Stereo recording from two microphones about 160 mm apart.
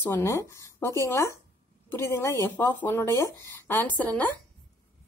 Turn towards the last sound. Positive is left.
turn(degrees=10)  # may be behind; listen again after turning